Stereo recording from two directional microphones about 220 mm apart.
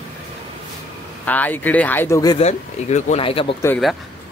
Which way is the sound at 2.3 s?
30° left (ahead or behind).